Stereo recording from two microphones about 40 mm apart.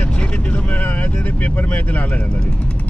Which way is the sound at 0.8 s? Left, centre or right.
Left.